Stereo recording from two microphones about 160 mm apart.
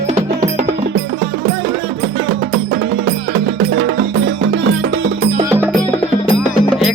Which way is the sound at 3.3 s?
75° right (ahead or behind).